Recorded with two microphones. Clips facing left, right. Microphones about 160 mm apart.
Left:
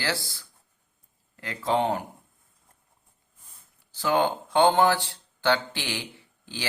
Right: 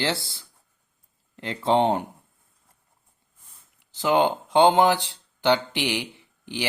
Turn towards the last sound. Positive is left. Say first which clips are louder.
# right 6 dB
turn(degrees=-15)  # may be behind; listen again after turning